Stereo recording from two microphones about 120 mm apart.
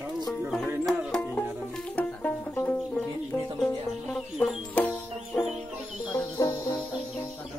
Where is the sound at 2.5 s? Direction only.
15° left (ahead or behind).